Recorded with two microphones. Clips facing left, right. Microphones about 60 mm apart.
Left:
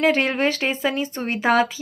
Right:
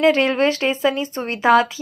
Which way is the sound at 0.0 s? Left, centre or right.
Left.